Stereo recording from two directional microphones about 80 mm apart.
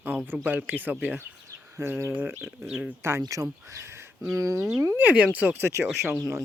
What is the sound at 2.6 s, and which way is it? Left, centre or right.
Speech, centre.